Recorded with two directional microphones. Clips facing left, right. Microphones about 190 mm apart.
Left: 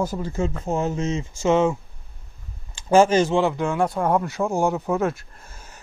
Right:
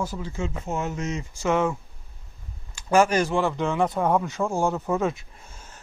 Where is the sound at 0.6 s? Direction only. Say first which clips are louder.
Left 4 dB; 30° left (ahead or behind).